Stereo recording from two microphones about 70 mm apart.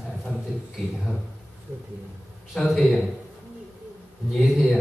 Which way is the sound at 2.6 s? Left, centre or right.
Centre.